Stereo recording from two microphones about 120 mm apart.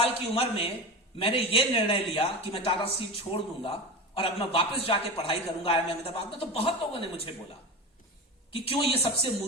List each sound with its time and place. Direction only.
0.0 s a man's voice: 50° left (ahead or behind)
8.5 s a man's voice: 50° left (ahead or behind)